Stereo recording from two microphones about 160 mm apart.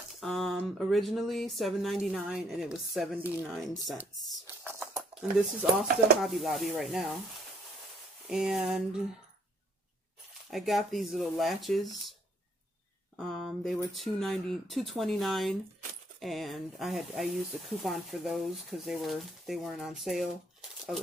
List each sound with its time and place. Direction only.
0.2 s speech: centre (ahead or behind)
5.1 s a sound: 35° right (ahead or behind)
5.6 s speech: centre (ahead or behind)
8.3 s speech: 5° right (ahead or behind)
10.5 s speech: centre (ahead or behind)